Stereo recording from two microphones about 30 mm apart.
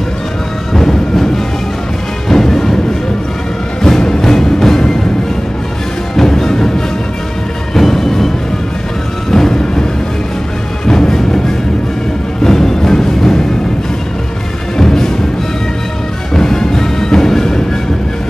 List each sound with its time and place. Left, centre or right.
0.7 s music: centre
4.2 s music: centre
6.1 s music: centre
7.7 s music: centre
9.3 s music: centre
10.9 s music: left
14.8 s music: centre
16.3 s music: centre